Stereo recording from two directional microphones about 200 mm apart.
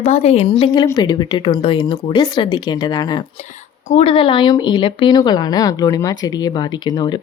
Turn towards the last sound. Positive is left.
turn(degrees=20)  # may be behind; listen again after turning